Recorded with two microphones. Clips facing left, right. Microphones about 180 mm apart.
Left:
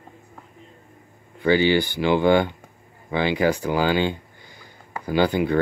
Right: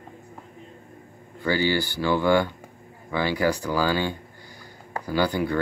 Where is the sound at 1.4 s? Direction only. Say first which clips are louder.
Left 5 dB; 20° left (ahead or behind).